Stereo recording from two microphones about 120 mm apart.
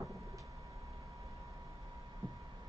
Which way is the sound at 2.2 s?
30° right (ahead or behind).